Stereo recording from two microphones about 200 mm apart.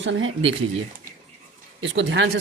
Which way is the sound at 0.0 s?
75° right (ahead or behind).